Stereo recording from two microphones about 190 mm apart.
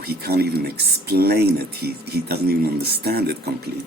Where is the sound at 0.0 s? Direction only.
55° right (ahead or behind).